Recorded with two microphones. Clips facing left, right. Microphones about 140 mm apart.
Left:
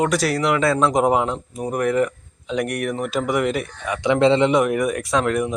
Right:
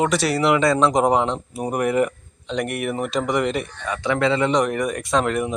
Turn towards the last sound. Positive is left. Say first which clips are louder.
# left 1 dB
turn(degrees=0)  # may be behind; listen again after turning